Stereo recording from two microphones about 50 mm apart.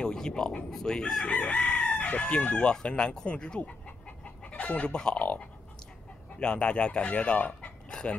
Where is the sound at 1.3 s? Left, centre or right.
Left.